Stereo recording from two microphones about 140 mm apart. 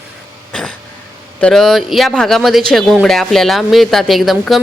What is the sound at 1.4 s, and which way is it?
Speech, centre (ahead or behind).